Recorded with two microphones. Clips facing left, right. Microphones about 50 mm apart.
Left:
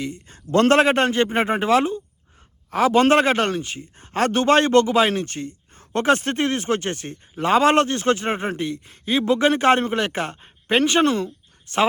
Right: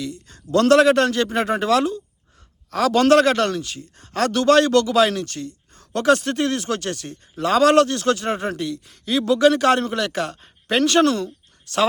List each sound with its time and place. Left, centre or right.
0.0 s speech: left